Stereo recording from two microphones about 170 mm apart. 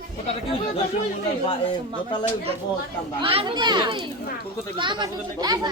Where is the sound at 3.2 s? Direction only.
30° right (ahead or behind).